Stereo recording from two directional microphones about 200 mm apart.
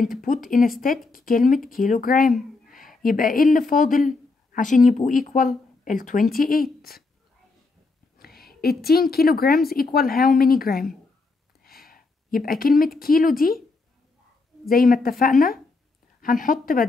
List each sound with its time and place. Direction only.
0.2 s a woman's voice: 40° left (ahead or behind)
8.2 s a woman's voice: 50° left (ahead or behind)
11.6 s a sound: 50° left (ahead or behind)
13.0 s a woman's voice: 45° left (ahead or behind)
14.7 s a woman's voice: 45° left (ahead or behind)